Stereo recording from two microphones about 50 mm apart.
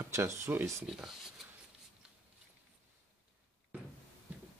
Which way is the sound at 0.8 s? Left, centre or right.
Centre.